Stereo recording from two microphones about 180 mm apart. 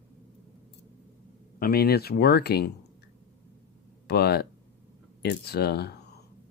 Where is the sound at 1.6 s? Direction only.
55° left (ahead or behind).